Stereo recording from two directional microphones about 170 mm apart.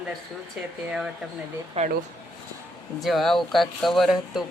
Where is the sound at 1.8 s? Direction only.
35° right (ahead or behind).